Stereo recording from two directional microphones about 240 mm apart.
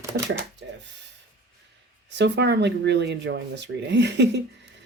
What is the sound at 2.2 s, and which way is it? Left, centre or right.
Speech, right.